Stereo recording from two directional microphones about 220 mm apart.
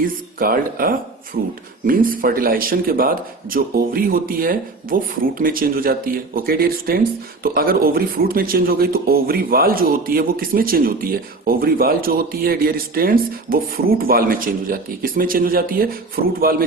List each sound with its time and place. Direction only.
0.0 s a man's voice: 40° right (ahead or behind)